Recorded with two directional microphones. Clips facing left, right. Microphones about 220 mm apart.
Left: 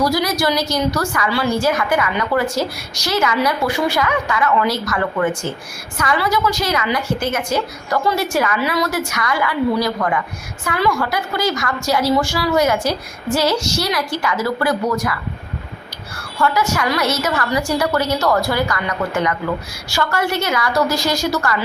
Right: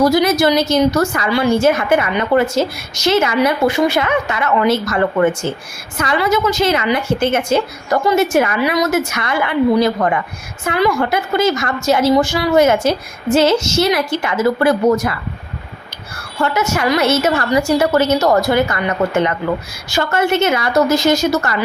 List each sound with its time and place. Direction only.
0.0 s a woman's voice: 20° right (ahead or behind)
16.4 s a woman's voice: 25° right (ahead or behind)